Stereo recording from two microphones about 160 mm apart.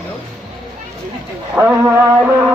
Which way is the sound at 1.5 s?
10° right (ahead or behind).